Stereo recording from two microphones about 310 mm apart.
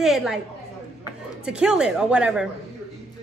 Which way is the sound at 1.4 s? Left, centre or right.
Centre.